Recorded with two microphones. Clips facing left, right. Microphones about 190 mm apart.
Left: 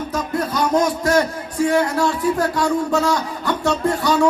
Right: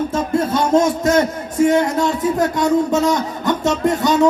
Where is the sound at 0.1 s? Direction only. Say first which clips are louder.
Right 4 dB; 25° right (ahead or behind).